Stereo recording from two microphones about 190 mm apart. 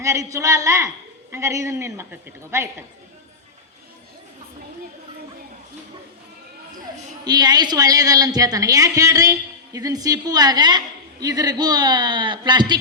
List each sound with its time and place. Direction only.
0.0 s a woman's voice: 15° right (ahead or behind)
7.3 s a woman's voice: 20° right (ahead or behind)